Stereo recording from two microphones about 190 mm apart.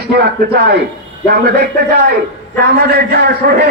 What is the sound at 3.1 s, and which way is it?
Speech, 55° right (ahead or behind).